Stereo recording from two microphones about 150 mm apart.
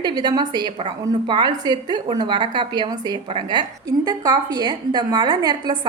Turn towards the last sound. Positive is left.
turn(degrees=-30)  # may be behind; listen again after turning